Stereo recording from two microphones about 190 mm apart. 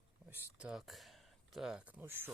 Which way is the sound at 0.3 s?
5° right (ahead or behind).